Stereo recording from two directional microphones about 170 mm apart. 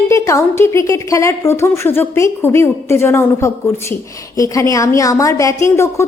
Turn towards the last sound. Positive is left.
turn(degrees=15)  # may be behind; listen again after turning